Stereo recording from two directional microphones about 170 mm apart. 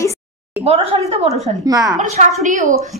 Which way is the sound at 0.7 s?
40° right (ahead or behind).